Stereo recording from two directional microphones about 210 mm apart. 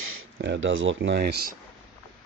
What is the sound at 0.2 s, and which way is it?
Speech, 60° right (ahead or behind).